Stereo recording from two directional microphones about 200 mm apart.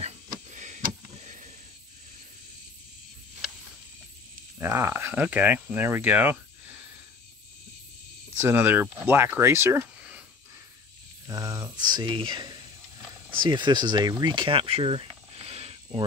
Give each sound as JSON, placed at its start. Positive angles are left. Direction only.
{"t": 0.5, "sound": "a sound", "side_deg": -35}
{"t": 4.6, "sound": "speech", "side_deg": -15}
{"t": 8.4, "sound": "speech", "side_deg": -10}
{"t": 11.2, "sound": "speech", "side_deg": -15}